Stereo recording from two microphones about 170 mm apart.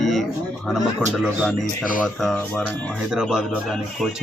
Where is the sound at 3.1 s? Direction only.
5° right (ahead or behind).